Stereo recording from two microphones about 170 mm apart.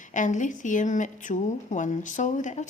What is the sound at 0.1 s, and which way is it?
A woman's voice, 45° left (ahead or behind).